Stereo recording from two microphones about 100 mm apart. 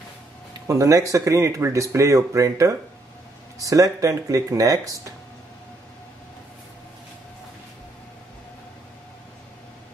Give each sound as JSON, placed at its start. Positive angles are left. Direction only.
{"t": 0.7, "sound": "speech", "side_deg": -35}